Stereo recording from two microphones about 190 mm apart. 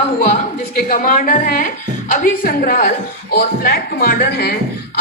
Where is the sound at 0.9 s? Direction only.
45° left (ahead or behind).